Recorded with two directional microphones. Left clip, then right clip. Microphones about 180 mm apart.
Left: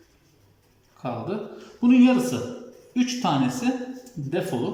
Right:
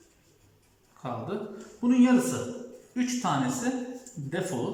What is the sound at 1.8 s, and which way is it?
Speech, 15° left (ahead or behind).